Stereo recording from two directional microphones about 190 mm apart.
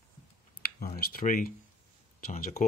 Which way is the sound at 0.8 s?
50° left (ahead or behind).